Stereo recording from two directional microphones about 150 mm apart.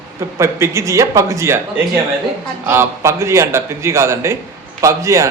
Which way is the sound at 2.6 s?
15° right (ahead or behind).